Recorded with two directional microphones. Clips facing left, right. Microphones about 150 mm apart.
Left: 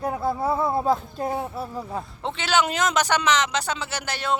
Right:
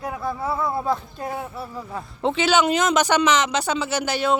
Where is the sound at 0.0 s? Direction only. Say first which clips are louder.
Left 3 dB; 30° left (ahead or behind).